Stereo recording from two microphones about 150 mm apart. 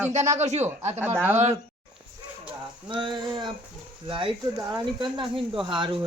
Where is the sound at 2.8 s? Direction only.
30° right (ahead or behind).